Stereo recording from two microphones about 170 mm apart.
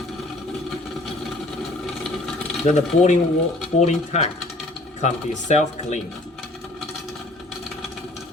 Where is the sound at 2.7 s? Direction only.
40° left (ahead or behind).